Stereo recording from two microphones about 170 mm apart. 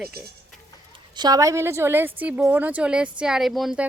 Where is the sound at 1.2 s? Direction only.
20° right (ahead or behind).